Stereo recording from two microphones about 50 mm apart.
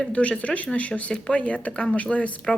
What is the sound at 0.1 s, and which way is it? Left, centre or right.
Speech, left.